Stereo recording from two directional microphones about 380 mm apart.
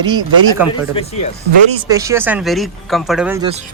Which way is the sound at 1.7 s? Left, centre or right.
Centre.